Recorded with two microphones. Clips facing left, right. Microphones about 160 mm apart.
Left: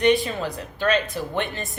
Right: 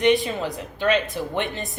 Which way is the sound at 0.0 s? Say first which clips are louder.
Even; 20° right (ahead or behind).